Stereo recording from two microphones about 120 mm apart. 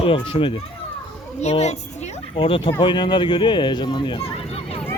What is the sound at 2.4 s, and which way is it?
Speech, 45° left (ahead or behind).